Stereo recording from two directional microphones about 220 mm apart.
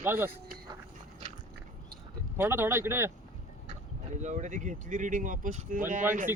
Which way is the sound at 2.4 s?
10° right (ahead or behind).